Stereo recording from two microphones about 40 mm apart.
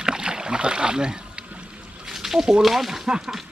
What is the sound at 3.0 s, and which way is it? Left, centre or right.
Speech, right.